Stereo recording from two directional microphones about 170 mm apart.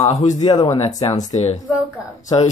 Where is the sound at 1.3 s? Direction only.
45° left (ahead or behind).